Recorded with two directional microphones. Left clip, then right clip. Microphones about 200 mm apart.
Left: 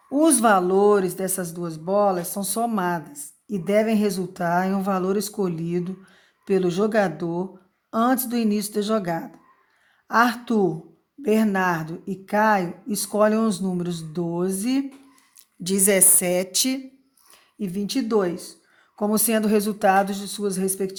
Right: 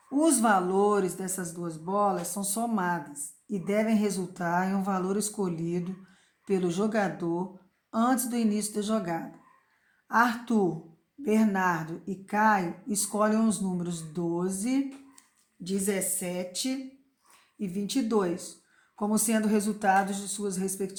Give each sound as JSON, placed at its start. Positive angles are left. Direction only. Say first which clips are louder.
{"t": 0.1, "sound": "speech", "louder": "left 6 dB", "side_deg": 35}
{"t": 15.6, "sound": "a woman's voice", "louder": "left 10 dB", "side_deg": 50}
{"t": 17.3, "sound": "speech", "louder": "left 5 dB", "side_deg": 35}